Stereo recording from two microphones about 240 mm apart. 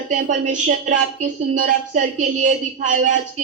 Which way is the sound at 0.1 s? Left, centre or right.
Right.